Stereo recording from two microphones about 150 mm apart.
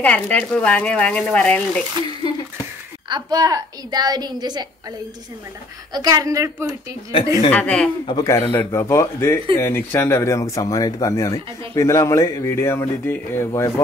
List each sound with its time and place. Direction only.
0.0 s speech: 10° left (ahead or behind)
3.1 s a woman's voice: 30° right (ahead or behind)
5.9 s a woman's voice: 25° right (ahead or behind)
7.1 s speech: 40° left (ahead or behind)
7.5 s speech: 5° left (ahead or behind)
8.1 s speech: 20° left (ahead or behind)